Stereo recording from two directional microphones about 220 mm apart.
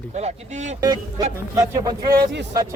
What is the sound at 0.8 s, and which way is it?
A man's voice, 15° right (ahead or behind).